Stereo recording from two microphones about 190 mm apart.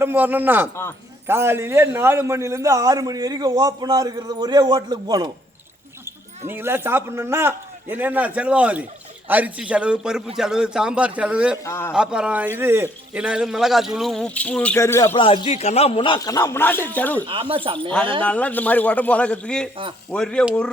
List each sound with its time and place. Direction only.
0.0 s a man's voice: 10° right (ahead or behind)
6.5 s a man's voice: 10° right (ahead or behind)
11.6 s a man's voice: 15° left (ahead or behind)
11.9 s a man's voice: 5° right (ahead or behind); by 15.1 s 15° left (ahead or behind)
15.1 s a man's voice: 30° left (ahead or behind); by 17.2 s 10° left (ahead or behind)
17.2 s a man's voice: 30° right (ahead or behind)
18.2 s a man's voice: 5° left (ahead or behind)